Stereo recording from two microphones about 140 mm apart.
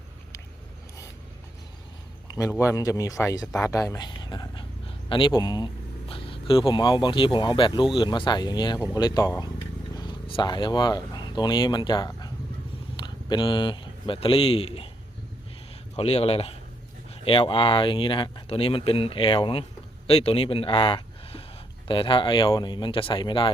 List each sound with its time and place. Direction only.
2.2 s a sound: 25° left (ahead or behind)
2.5 s speech: 20° left (ahead or behind)
6.1 s vehicle: 40° left (ahead or behind)
6.5 s speech: 40° left (ahead or behind)
16.0 s speech: 45° left (ahead or behind)